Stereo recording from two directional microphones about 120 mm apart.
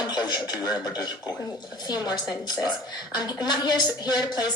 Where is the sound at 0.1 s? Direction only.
35° left (ahead or behind).